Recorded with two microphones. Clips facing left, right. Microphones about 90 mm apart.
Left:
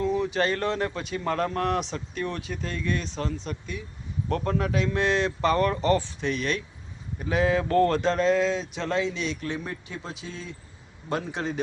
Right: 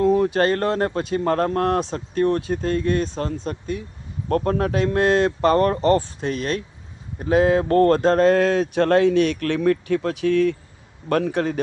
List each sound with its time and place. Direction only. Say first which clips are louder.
0.0 s speech: right 7 dB; 50° right (ahead or behind)